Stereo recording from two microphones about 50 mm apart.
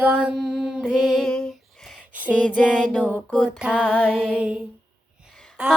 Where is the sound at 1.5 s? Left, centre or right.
Centre.